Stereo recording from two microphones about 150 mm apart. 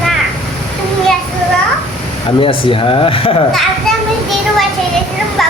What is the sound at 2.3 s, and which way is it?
Speech, 35° left (ahead or behind).